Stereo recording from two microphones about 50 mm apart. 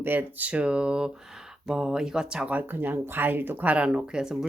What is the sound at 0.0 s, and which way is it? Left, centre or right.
Speech, right.